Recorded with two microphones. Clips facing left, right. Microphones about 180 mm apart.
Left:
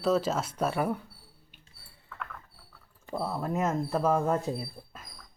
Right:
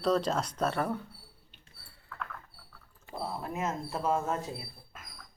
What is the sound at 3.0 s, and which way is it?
Speech, 40° left (ahead or behind).